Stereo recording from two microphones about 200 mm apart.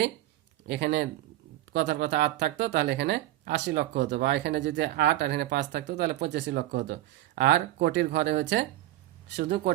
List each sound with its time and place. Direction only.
0.7 s speech: 55° right (ahead or behind)